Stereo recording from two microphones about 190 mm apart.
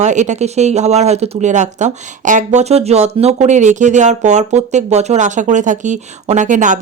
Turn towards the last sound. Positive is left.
turn(degrees=-40)  # may be behind; listen again after turning